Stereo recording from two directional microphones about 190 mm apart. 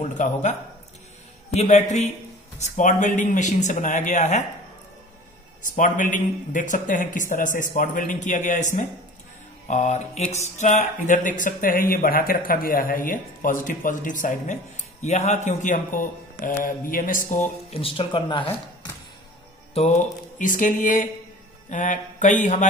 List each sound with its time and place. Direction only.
0.0 s a man's voice: 40° left (ahead or behind)
5.6 s speech: 45° left (ahead or behind)
17.7 s speech: 30° left (ahead or behind)
19.7 s speech: 35° left (ahead or behind)